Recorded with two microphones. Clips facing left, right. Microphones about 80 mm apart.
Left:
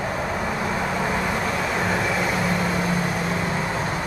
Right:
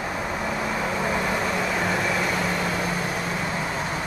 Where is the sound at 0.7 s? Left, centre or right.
Centre.